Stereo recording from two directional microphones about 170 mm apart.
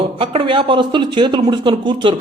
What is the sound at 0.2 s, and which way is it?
Speech, 30° right (ahead or behind).